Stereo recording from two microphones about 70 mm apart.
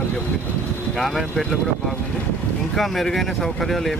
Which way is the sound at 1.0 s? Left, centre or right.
Centre.